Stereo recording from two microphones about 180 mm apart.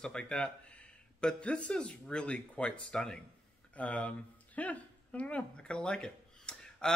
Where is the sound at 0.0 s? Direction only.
5° left (ahead or behind).